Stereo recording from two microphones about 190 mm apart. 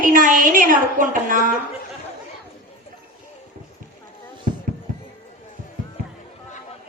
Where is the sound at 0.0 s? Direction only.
45° right (ahead or behind).